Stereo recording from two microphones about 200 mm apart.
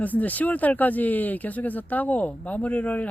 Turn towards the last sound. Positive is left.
turn(degrees=5)  # may be behind; listen again after turning